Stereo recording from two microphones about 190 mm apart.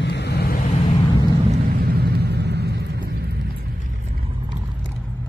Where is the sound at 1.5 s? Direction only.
50° right (ahead or behind).